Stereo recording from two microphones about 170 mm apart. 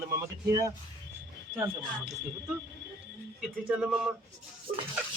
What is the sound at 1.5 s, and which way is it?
Speech, 10° right (ahead or behind).